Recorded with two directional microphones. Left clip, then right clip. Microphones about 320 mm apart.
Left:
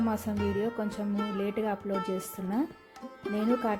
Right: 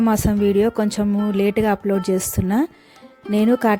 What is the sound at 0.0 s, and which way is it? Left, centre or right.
A woman's voice, right.